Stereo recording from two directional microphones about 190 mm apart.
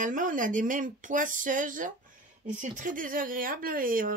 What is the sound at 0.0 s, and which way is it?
Speech, 45° right (ahead or behind).